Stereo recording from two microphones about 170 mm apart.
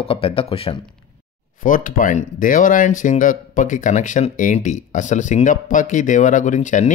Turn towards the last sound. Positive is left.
turn(degrees=45)  # may be behind; listen again after turning